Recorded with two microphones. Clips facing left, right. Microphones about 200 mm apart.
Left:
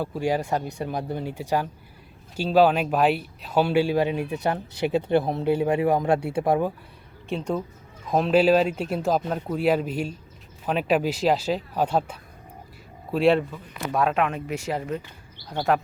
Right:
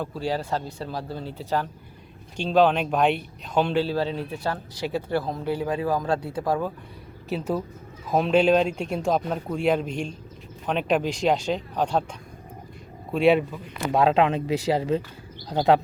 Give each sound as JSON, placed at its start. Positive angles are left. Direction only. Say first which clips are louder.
{"t": 0.0, "sound": "speech", "louder": "left 3 dB", "side_deg": 15}
{"t": 7.3, "sound": "a man's voice", "louder": "even", "side_deg": -5}
{"t": 13.9, "sound": "speech", "louder": "right 4 dB", "side_deg": -25}
{"t": 15.5, "sound": "speech", "louder": "right 4 dB", "side_deg": -20}